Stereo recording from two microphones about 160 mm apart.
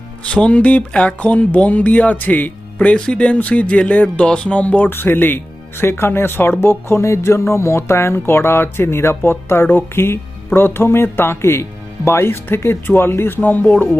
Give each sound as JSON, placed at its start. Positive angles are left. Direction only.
{"t": 0.3, "sound": "speech", "side_deg": 5}